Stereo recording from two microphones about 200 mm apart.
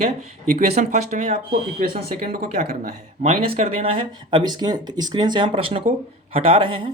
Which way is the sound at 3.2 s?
25° right (ahead or behind).